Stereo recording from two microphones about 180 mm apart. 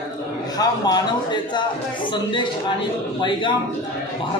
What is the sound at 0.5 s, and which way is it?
A man's voice, 20° left (ahead or behind).